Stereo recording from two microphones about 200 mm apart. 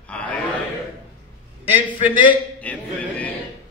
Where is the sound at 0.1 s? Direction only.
5° left (ahead or behind).